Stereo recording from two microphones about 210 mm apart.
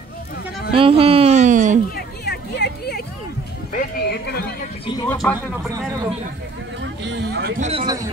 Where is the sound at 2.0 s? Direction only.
50° left (ahead or behind).